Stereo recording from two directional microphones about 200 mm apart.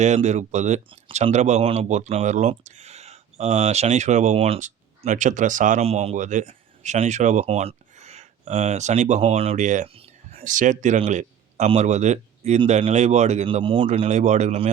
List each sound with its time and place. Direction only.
0.0 s speech: 35° right (ahead or behind)